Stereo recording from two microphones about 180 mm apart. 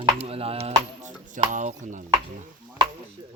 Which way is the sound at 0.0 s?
35° right (ahead or behind).